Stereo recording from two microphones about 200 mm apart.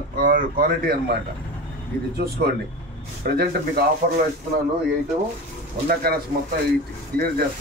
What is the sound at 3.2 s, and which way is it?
Speech, 50° right (ahead or behind).